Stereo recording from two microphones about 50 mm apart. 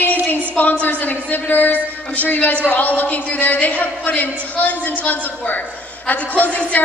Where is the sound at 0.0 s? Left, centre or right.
Left.